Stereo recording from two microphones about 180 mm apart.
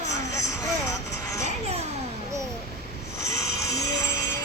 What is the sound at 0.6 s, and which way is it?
Music, 20° left (ahead or behind).